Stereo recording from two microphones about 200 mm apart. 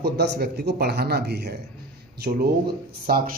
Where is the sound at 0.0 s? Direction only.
55° right (ahead or behind).